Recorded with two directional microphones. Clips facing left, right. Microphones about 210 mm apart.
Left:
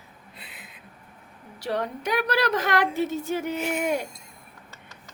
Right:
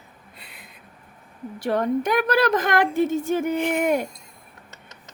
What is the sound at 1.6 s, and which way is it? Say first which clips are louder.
A woman's voice: right 7 dB; 50° right (ahead or behind).